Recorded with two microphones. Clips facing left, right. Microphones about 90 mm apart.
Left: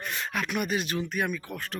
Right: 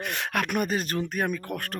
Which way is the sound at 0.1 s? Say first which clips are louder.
Right 3 dB; 60° right (ahead or behind).